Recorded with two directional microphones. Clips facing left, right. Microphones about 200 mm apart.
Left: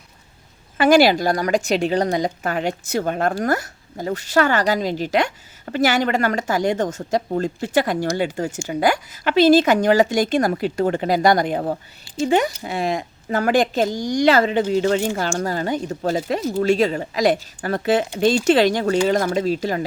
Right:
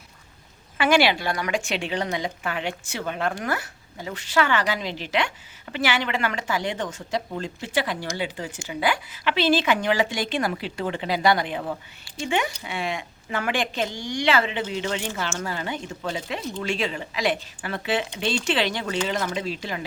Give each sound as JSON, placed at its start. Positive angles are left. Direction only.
{"t": 0.8, "sound": "a woman's voice", "side_deg": 40}